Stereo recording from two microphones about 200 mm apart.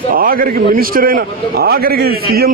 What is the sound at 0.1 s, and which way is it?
A man's voice, 45° right (ahead or behind).